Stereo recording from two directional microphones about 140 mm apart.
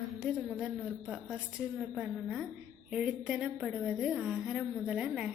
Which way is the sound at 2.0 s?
5° right (ahead or behind).